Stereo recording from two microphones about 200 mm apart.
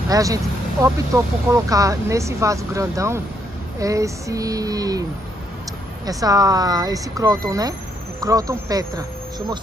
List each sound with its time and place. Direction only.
0.1 s speech: 15° right (ahead or behind)
6.0 s speech: 20° right (ahead or behind)